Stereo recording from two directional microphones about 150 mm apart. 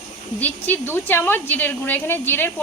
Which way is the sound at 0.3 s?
10° left (ahead or behind).